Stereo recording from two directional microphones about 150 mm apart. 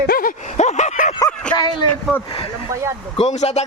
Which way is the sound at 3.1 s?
50° left (ahead or behind).